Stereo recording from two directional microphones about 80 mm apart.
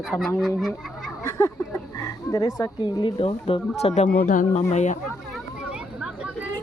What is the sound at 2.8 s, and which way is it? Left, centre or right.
Speech, left.